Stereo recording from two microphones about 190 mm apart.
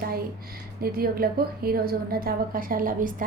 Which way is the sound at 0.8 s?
50° right (ahead or behind).